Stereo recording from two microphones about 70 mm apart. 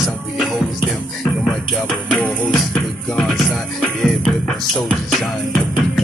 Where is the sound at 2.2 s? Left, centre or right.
Centre.